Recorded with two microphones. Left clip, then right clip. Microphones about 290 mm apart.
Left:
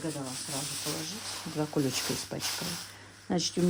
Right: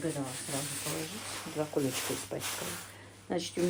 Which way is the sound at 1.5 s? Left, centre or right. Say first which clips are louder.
Left 2 dB; left.